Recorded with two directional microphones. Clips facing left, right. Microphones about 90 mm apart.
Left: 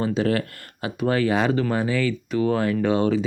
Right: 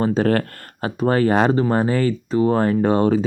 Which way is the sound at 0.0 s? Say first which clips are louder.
Right 4 dB; 45° right (ahead or behind).